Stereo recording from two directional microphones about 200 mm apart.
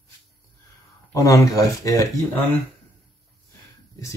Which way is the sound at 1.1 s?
15° left (ahead or behind).